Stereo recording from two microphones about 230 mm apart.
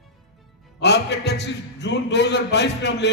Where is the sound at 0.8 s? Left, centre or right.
Left.